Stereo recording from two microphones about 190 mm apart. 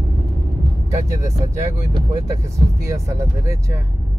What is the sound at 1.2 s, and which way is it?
Speech, 20° right (ahead or behind).